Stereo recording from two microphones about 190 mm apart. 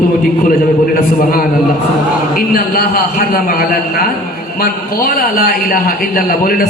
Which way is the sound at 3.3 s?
50° left (ahead or behind).